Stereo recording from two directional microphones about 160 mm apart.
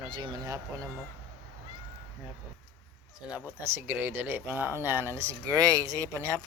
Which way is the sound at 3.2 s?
5° right (ahead or behind).